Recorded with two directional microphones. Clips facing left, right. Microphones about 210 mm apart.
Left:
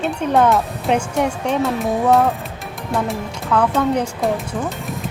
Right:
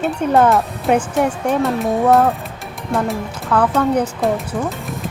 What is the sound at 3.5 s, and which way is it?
Speech, centre (ahead or behind).